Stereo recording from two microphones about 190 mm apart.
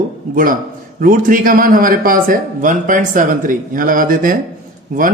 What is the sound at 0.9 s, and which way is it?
Speech, 45° right (ahead or behind).